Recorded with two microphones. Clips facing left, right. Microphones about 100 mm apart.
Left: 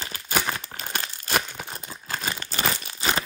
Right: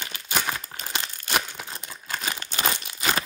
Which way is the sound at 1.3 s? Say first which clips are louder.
Left 1 dB; 45° left (ahead or behind).